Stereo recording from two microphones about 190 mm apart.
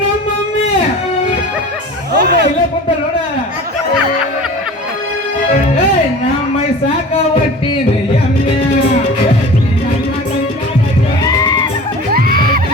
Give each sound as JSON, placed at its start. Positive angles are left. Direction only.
{"t": 2.1, "sound": "speech", "side_deg": -60}
{"t": 11.2, "sound": "music", "side_deg": 20}
{"t": 12.1, "sound": "music", "side_deg": -50}